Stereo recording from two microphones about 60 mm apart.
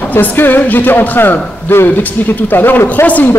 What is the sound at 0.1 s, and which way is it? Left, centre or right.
A woman's voice, left.